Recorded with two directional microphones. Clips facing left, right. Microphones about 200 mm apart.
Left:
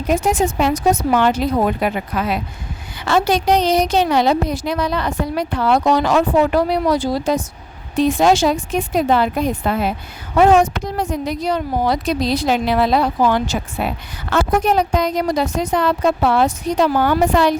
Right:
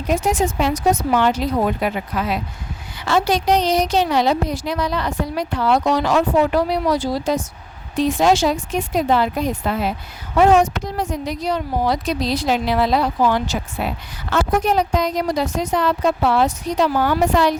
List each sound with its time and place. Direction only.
0.1 s a woman's voice: 50° left (ahead or behind)